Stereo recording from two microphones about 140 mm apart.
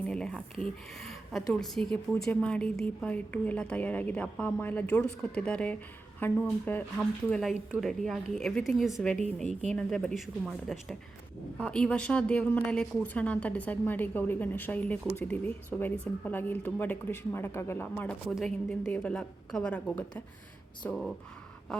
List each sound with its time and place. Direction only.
0.1 s speech: 5° left (ahead or behind)
0.9 s a sound: centre (ahead or behind)
1.6 s a woman's voice: 5° left (ahead or behind)
18.3 s a woman's voice: centre (ahead or behind)